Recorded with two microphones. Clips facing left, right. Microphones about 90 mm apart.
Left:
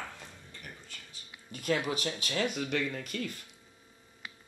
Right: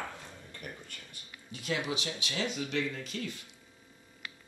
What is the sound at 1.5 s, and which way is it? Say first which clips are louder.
Speech: left 3 dB; 45° left (ahead or behind).